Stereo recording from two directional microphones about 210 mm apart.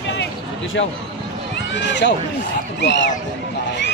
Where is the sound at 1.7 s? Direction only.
55° left (ahead or behind).